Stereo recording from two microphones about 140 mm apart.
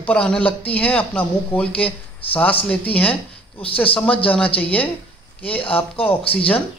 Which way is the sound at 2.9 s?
10° left (ahead or behind).